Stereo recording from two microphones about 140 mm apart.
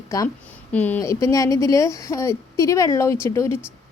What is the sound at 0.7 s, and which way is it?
A woman's voice, 10° left (ahead or behind).